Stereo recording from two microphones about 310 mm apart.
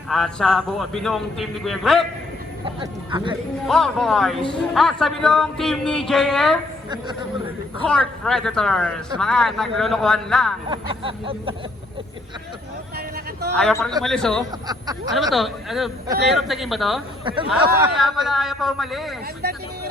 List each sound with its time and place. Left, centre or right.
0.1 s speech: centre
2.6 s vehicle: centre
3.7 s speech: centre
6.9 s vehicle: centre
7.8 s speech: centre
10.7 s vehicle: centre
13.6 s speech: centre
14.7 s vehicle: centre
15.1 s speech: centre
17.2 s vehicle: centre
17.9 s speech: centre